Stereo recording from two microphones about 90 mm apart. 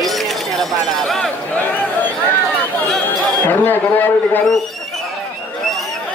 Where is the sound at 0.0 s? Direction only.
Centre (ahead or behind).